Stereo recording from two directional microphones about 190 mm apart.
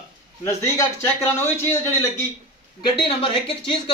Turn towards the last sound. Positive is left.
turn(degrees=25)  # may be behind; listen again after turning